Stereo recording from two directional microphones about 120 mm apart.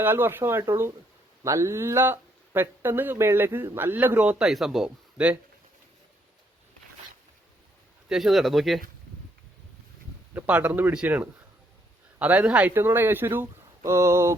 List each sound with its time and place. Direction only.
0.0 s speech: 15° right (ahead or behind)
8.1 s speech: centre (ahead or behind)
10.3 s speech: 15° right (ahead or behind)